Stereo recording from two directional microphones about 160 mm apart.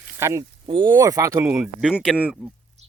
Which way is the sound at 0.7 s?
30° right (ahead or behind).